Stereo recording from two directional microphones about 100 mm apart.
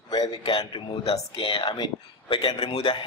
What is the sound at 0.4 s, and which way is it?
A man's voice, 75° left (ahead or behind).